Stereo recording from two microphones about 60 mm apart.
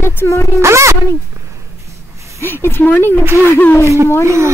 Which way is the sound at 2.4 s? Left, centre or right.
Left.